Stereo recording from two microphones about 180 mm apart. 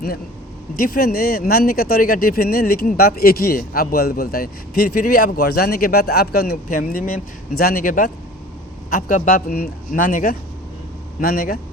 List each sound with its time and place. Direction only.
0.8 s a man's voice: 55° left (ahead or behind)